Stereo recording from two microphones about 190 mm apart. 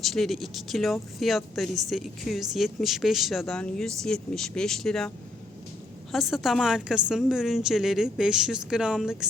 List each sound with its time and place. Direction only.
0.0 s speech: centre (ahead or behind)